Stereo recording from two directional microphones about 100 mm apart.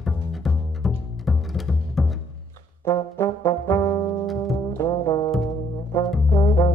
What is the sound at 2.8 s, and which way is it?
Brass instrument, 25° left (ahead or behind).